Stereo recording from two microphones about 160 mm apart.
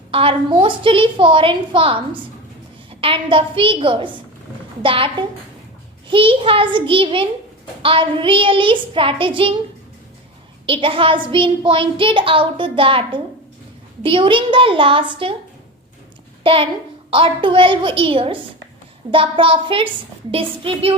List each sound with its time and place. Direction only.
0.1 s a woman's voice: 35° right (ahead or behind)
10.7 s a woman's voice: 35° right (ahead or behind)
16.4 s a child's voice: 35° right (ahead or behind)